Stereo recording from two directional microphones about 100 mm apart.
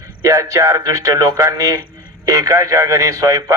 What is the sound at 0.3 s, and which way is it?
A man's voice, 35° right (ahead or behind).